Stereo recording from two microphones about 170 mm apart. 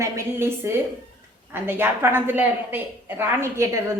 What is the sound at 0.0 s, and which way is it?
A woman's voice, 15° right (ahead or behind).